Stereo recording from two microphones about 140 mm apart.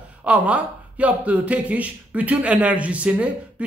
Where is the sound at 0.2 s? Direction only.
10° right (ahead or behind).